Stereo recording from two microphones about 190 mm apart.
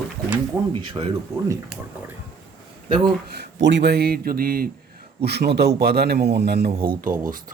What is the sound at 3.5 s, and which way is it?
A man's voice, 65° right (ahead or behind).